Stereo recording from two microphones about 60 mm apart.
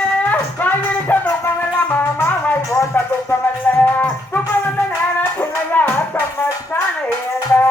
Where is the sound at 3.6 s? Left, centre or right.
Left.